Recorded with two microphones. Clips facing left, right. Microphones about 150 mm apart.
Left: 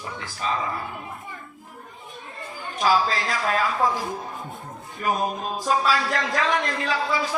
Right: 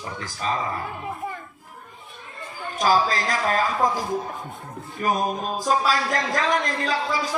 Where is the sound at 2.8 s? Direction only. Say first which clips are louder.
Right 1 dB; 40° right (ahead or behind).